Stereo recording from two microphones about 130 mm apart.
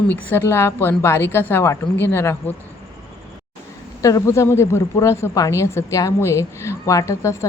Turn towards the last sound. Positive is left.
turn(degrees=20)  # may be behind; listen again after turning